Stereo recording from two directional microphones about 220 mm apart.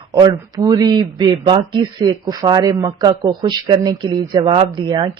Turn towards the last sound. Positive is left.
turn(degrees=-20)  # may be behind; listen again after turning